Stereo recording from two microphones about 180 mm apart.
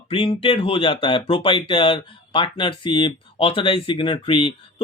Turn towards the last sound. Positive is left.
turn(degrees=30)  # may be behind; listen again after turning